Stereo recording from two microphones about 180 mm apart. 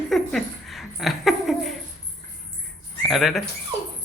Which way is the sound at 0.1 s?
Centre (ahead or behind).